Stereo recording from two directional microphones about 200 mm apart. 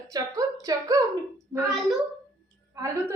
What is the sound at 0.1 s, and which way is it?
Speech, 20° right (ahead or behind).